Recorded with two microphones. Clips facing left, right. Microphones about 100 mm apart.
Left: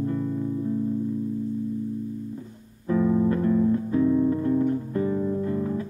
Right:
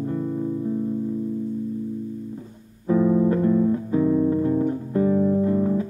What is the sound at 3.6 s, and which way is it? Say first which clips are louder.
Music: right 1 dB; 20° right (ahead or behind).